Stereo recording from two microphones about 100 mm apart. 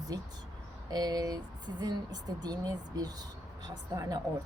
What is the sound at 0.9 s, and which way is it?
A woman's voice, 40° right (ahead or behind).